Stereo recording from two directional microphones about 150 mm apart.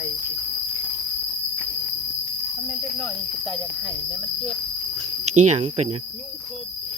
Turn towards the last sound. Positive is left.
turn(degrees=-45)  # may be behind; listen again after turning